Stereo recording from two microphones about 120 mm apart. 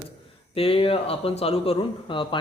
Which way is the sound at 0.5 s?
50° left (ahead or behind).